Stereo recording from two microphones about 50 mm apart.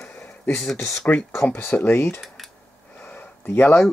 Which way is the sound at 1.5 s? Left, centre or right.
Left.